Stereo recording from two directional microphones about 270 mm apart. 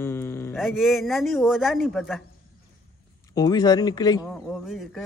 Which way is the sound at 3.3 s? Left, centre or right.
Centre.